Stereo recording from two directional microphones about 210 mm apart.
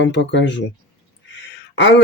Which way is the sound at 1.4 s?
60° left (ahead or behind).